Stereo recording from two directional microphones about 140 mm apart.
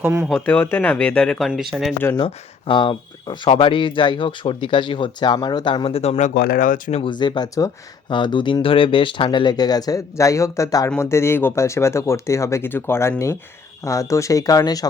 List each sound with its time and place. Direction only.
0.0 s speech: 15° right (ahead or behind)
0.3 s speech: 5° left (ahead or behind)
2.1 s speech: 35° left (ahead or behind); by 7.0 s 70° left (ahead or behind)
7.0 s speech: 35° left (ahead or behind)